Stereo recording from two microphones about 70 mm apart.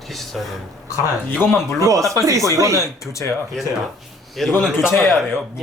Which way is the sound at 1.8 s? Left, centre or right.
Right.